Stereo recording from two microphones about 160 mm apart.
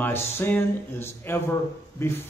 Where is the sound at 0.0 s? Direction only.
15° left (ahead or behind).